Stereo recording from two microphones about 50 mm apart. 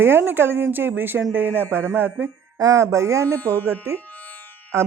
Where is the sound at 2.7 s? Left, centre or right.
Right.